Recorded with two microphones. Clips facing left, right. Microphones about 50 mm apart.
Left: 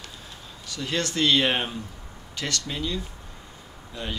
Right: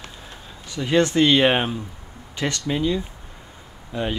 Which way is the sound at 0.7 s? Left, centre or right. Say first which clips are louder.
Right 9 dB; centre.